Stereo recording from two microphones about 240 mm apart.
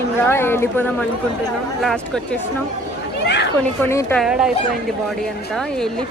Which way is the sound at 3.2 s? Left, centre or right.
Left.